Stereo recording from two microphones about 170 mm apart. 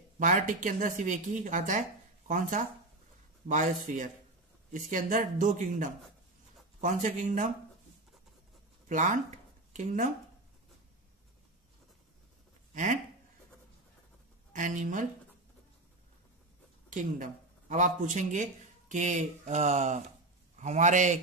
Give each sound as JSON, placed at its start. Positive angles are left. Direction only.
{"t": 0.2, "sound": "speech", "side_deg": -50}
{"t": 8.8, "sound": "speech", "side_deg": -50}
{"t": 12.7, "sound": "speech", "side_deg": -45}
{"t": 14.5, "sound": "speech", "side_deg": -50}
{"t": 16.9, "sound": "speech", "side_deg": -50}